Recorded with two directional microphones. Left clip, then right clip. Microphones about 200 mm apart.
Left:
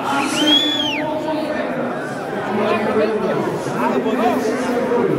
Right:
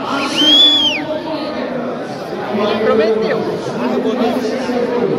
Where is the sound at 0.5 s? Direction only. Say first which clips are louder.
Right 9 dB; 40° right (ahead or behind).